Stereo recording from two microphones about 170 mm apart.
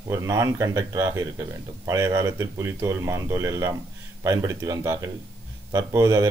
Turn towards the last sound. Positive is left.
turn(degrees=-20)  # may be behind; listen again after turning